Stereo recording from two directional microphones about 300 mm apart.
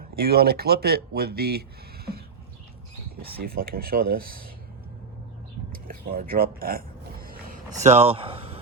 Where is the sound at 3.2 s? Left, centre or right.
Right.